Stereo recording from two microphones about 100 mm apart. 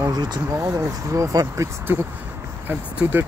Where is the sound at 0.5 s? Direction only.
30° right (ahead or behind).